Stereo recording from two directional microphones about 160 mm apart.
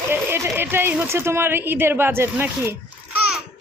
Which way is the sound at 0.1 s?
15° right (ahead or behind).